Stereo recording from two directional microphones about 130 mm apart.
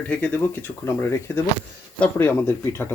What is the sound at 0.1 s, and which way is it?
Speech, 10° left (ahead or behind).